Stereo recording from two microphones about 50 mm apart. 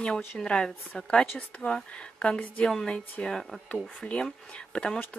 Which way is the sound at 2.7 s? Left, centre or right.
Centre.